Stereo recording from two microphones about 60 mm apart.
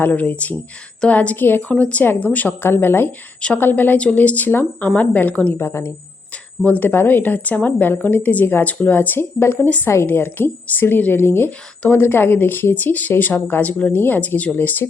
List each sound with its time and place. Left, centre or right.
0.0 s speech: left
1.7 s a woman's voice: left
3.9 s speech: left
5.5 s speech: left
6.7 s a woman's voice: left
13.9 s a woman's voice: left